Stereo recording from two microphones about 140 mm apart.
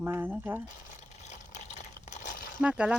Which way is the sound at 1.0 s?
55° left (ahead or behind).